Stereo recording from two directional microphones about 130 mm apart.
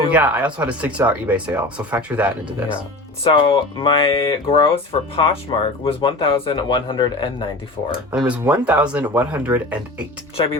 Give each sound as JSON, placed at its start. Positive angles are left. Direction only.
{"t": 0.1, "sound": "speech", "side_deg": -10}
{"t": 3.2, "sound": "speech", "side_deg": 40}
{"t": 7.9, "sound": "speech", "side_deg": -5}
{"t": 10.4, "sound": "speech", "side_deg": 40}